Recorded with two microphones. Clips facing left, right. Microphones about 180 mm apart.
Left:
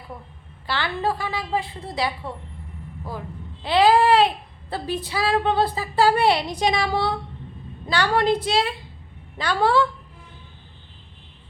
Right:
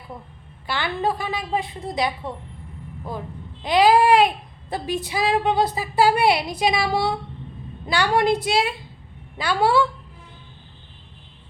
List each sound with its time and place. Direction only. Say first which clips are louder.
0.7 s a woman's voice: right 1 dB; 15° right (ahead or behind)
3.6 s a woman's voice: right 1 dB; 15° right (ahead or behind)